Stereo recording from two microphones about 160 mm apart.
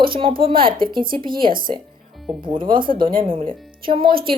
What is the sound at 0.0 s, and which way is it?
Speech, 35° right (ahead or behind).